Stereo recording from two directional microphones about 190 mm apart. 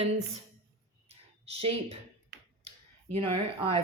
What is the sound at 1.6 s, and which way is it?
Speech, 30° right (ahead or behind).